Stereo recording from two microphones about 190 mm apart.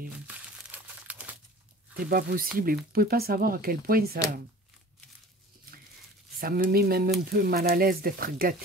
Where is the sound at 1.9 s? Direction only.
50° right (ahead or behind).